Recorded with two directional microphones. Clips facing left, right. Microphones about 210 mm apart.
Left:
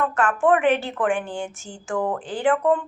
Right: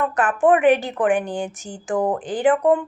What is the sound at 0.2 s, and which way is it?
Speech, 15° right (ahead or behind).